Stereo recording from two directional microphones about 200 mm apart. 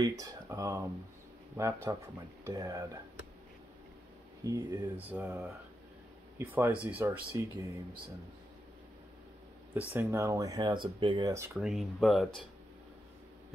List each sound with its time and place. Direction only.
0.0 s speech: 15° right (ahead or behind)
4.4 s speech: 15° right (ahead or behind)
9.8 s speech: 10° right (ahead or behind)